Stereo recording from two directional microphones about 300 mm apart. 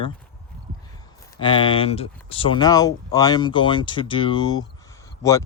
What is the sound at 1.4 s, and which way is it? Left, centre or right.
Speech, centre.